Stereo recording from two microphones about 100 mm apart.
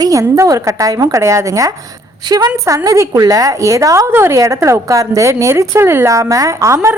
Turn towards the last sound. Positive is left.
turn(degrees=-30)  # may be behind; listen again after turning